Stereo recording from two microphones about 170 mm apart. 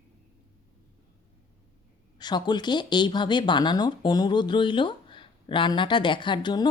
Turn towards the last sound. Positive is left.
turn(degrees=25)  # may be behind; listen again after turning